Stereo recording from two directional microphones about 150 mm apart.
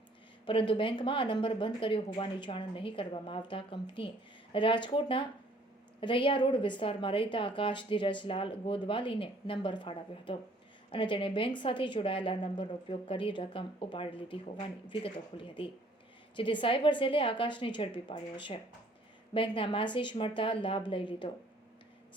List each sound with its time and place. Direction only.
0.4 s a woman's voice: 35° left (ahead or behind)